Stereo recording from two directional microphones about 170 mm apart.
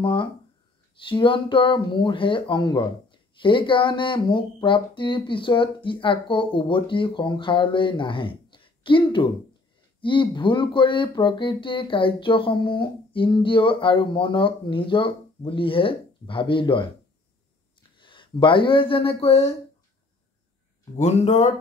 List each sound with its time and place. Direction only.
0.0 s speech: 30° left (ahead or behind)
17.9 s speech: 30° left (ahead or behind)
21.0 s speech: 40° left (ahead or behind)